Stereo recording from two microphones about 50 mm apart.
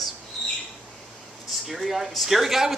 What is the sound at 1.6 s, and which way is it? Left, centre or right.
Speech, centre.